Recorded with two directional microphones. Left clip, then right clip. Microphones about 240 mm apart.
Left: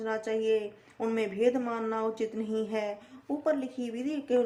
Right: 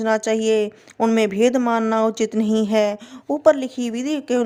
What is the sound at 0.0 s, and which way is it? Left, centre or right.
Speech, right.